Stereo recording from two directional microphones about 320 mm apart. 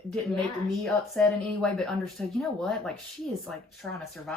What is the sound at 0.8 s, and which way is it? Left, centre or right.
Speech, centre.